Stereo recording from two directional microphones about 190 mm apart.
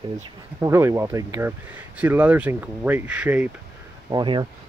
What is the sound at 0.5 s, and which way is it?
Speech, 15° right (ahead or behind).